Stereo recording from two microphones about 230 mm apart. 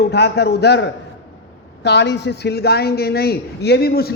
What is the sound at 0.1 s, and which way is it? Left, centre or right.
A man's voice, left.